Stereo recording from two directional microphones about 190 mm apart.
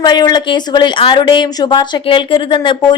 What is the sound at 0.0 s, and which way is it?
Speech, 20° left (ahead or behind).